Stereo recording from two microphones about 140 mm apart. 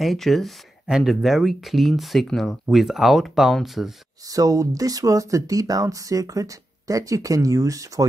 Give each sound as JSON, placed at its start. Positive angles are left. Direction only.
{"t": 0.0, "sound": "speech", "side_deg": 0}
{"t": 4.3, "sound": "speech", "side_deg": -25}